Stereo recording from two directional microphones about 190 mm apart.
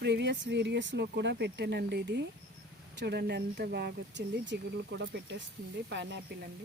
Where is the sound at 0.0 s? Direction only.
65° right (ahead or behind).